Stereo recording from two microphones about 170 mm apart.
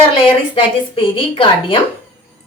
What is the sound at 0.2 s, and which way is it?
A woman's voice, 30° left (ahead or behind).